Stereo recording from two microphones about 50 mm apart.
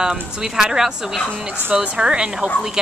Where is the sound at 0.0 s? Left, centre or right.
Centre.